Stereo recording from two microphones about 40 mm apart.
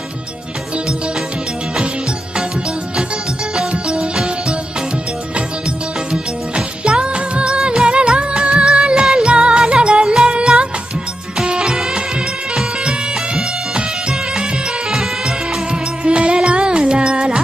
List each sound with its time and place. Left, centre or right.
6.1 s music: right
16.0 s music: right